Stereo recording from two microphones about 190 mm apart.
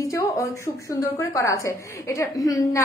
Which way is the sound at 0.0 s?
15° left (ahead or behind).